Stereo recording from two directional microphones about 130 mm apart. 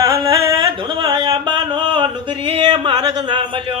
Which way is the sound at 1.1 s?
35° right (ahead or behind).